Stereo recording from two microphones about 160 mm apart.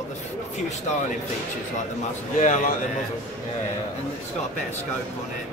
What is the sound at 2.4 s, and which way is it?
Speech, 50° left (ahead or behind).